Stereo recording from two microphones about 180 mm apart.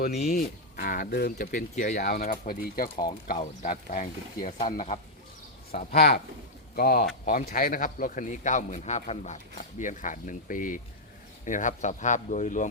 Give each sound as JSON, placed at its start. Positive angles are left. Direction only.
{"t": 0.3, "sound": "speech", "side_deg": 50}
{"t": 2.9, "sound": "speech", "side_deg": 25}
{"t": 3.2, "sound": "speech", "side_deg": 50}
{"t": 5.9, "sound": "speech", "side_deg": 60}